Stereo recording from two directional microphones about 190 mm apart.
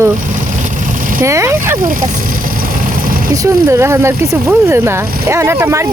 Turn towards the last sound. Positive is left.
turn(degrees=-15)  # may be behind; listen again after turning